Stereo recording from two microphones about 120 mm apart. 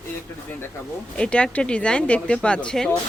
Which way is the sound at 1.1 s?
10° left (ahead or behind).